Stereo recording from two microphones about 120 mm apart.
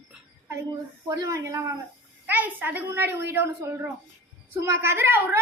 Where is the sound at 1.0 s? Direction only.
30° right (ahead or behind).